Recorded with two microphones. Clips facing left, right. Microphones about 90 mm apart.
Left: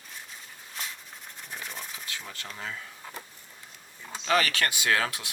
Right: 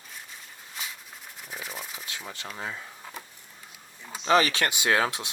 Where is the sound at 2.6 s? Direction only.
20° right (ahead or behind).